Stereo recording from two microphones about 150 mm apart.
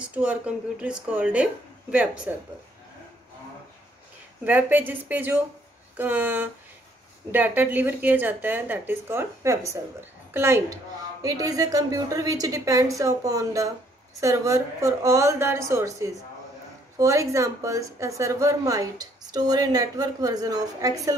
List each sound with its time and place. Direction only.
0.0 s speech: 10° right (ahead or behind)
4.5 s a woman's voice: 10° right (ahead or behind)